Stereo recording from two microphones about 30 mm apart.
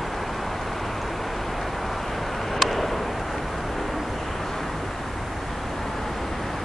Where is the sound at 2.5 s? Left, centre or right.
Centre.